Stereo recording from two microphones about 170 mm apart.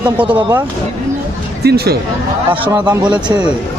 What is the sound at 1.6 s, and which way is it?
Speech, 70° right (ahead or behind).